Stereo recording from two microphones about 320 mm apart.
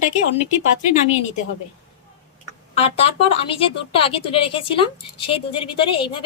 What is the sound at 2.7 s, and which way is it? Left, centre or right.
Speech, centre.